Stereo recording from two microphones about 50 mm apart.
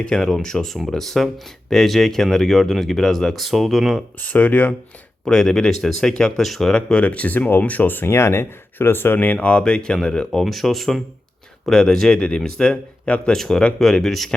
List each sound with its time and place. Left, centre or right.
0.0 s speech: centre
4.2 s speech: left
5.2 s speech: centre
7.0 s speech: left
8.0 s speech: left
9.1 s speech: left; by 10.4 s centre
10.4 s speech: centre
12.7 s speech: left
13.3 s speech: centre